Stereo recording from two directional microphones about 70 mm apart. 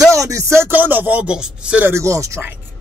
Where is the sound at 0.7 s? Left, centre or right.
Right.